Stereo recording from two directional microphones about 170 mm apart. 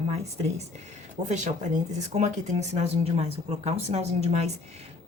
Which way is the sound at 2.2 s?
40° right (ahead or behind).